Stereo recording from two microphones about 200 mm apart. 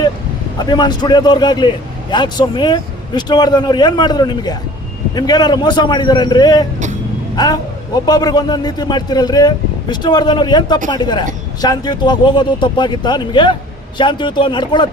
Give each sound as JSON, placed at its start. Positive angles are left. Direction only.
{"t": 0.6, "sound": "a man's voice", "side_deg": 20}